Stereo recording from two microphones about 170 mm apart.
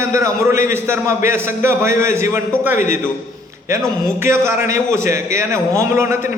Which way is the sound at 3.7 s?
15° right (ahead or behind).